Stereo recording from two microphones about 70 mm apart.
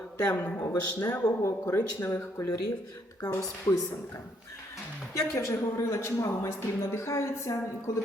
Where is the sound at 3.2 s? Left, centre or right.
Left.